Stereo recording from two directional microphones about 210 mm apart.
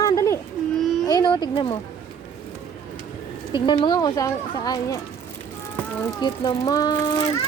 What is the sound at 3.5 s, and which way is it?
Speech, 20° left (ahead or behind).